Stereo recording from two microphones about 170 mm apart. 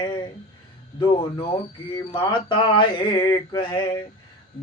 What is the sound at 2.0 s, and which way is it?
Speech, 30° left (ahead or behind).